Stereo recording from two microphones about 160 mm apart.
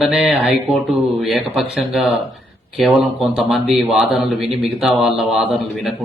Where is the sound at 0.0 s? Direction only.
Centre (ahead or behind).